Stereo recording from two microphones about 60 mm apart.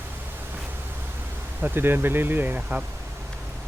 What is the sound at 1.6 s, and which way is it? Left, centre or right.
Speech, right.